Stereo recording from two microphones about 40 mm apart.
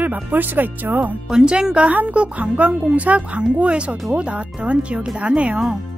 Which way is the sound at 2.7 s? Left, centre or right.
Right.